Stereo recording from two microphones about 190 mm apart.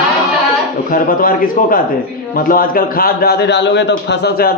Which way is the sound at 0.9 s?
50° left (ahead or behind).